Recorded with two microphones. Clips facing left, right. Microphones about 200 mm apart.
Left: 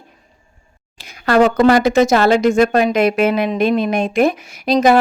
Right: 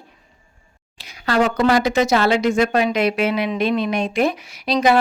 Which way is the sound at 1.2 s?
45° left (ahead or behind).